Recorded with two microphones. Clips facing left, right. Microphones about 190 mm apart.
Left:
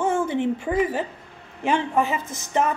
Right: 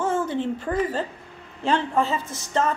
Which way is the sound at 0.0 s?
15° left (ahead or behind).